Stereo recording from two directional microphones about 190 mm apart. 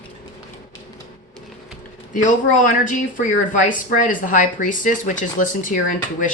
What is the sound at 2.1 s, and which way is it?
Speech, 45° left (ahead or behind).